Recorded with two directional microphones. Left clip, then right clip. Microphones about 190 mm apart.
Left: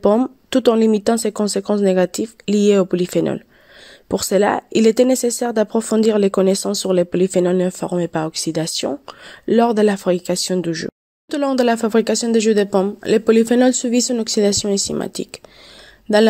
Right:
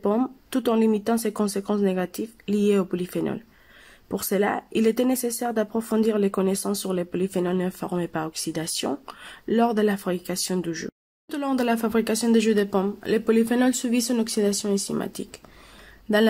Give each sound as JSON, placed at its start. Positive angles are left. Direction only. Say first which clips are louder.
{"t": 0.0, "sound": "speech", "louder": "left 9 dB", "side_deg": 35}